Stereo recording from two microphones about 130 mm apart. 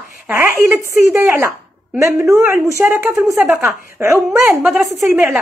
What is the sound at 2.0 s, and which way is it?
A woman's voice, 20° right (ahead or behind).